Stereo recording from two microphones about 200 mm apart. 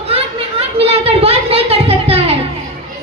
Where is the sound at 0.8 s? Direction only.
30° right (ahead or behind).